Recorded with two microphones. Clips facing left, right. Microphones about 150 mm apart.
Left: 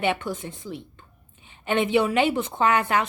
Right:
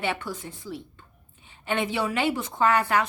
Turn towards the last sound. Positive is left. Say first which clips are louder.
# left 1 dB
turn(degrees=20)  # may be behind; listen again after turning